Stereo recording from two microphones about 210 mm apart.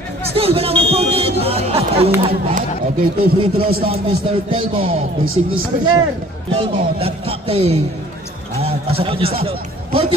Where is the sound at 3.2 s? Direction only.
25° right (ahead or behind).